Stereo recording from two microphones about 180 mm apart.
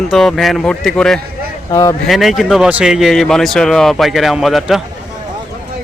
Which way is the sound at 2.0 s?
Centre (ahead or behind).